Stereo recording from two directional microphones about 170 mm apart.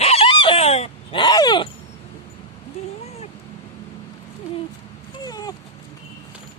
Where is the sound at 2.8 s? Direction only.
40° left (ahead or behind).